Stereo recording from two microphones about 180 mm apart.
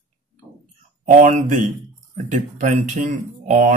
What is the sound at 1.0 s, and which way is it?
Speech, 45° right (ahead or behind).